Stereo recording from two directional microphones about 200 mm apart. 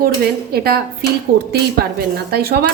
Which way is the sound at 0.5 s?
50° right (ahead or behind).